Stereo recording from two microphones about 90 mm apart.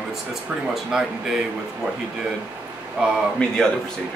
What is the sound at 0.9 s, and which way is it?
Speech, 5° right (ahead or behind).